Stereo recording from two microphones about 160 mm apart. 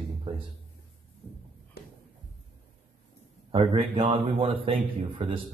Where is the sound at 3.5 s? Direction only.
35° right (ahead or behind).